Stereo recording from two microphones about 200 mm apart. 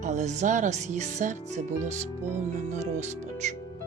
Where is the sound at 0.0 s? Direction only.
35° right (ahead or behind).